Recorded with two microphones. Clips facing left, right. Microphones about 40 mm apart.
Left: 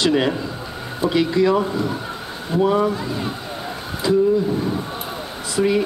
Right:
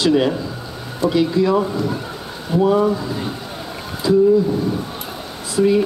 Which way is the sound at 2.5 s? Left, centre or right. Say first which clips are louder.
Right 2 dB; left.